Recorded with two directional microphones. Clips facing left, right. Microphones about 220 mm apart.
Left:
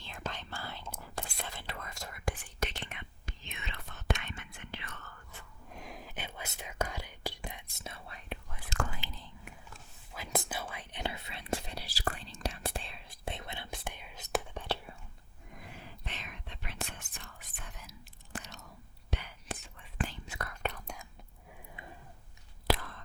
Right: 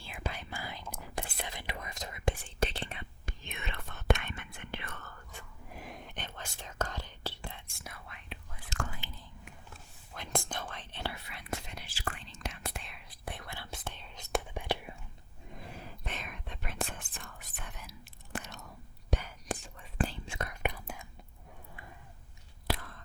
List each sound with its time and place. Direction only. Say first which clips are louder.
0.0 s whispering: right 1 dB; 10° right (ahead or behind)
2.6 s whispering: right 4 dB; 30° right (ahead or behind)
3.2 s whispering: right 4 dB; 55° right (ahead or behind)
5.3 s whispering: right 1 dB; 5° right (ahead or behind); by 8.2 s 30° left (ahead or behind)
8.9 s whispering: left 2 dB; 90° left
9.7 s whispering: right 1 dB; 5° left (ahead or behind)
14.5 s whispering: right 2 dB; 10° right (ahead or behind)
15.5 s whispering: right 3 dB; 35° right (ahead or behind)
17.6 s whispering: right 3 dB; 65° right (ahead or behind)
19.1 s whispering: right 5 dB; 45° right (ahead or behind); by 21.1 s 5° right (ahead or behind)
22.6 s whispering: left 4 dB; 90° left